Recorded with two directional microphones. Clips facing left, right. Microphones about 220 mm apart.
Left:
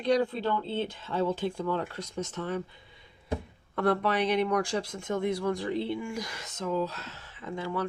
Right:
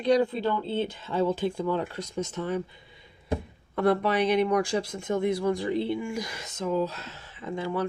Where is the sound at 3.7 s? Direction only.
10° right (ahead or behind).